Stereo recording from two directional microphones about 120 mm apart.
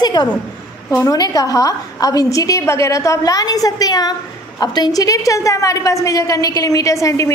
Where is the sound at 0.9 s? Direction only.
30° left (ahead or behind).